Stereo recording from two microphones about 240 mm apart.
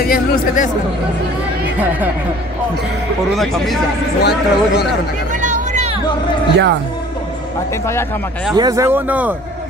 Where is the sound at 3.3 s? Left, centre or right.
Centre.